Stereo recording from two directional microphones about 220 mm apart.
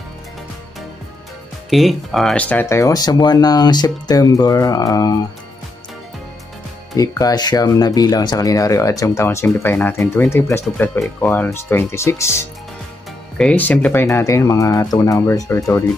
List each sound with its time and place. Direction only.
1.7 s speech: centre (ahead or behind); by 5.2 s 15° left (ahead or behind)
7.0 s speech: 15° left (ahead or behind)